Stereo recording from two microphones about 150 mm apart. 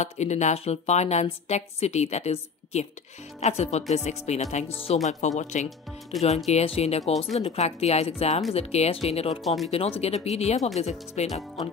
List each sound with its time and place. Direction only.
0.0 s a woman's voice: 50° left (ahead or behind)
5.4 s a woman's voice: 50° left (ahead or behind)